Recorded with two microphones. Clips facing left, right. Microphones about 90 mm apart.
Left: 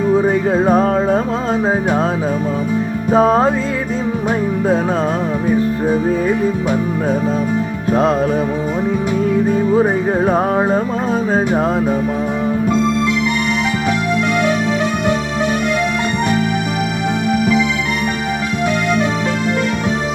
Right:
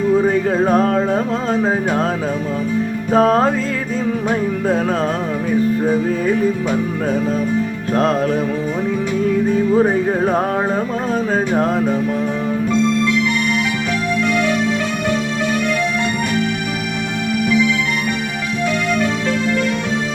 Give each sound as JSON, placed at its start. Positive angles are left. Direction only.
{"t": 0.3, "sound": "music", "side_deg": 30}
{"t": 3.2, "sound": "music", "side_deg": 15}
{"t": 9.5, "sound": "music", "side_deg": 45}